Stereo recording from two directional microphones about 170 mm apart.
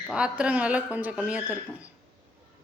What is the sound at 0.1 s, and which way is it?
A woman's voice, 5° right (ahead or behind).